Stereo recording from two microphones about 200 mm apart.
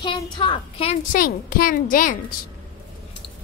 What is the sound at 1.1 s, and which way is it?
A child's voice, 45° left (ahead or behind).